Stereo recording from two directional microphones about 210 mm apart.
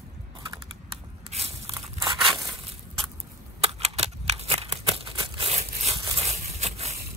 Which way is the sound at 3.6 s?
30° right (ahead or behind).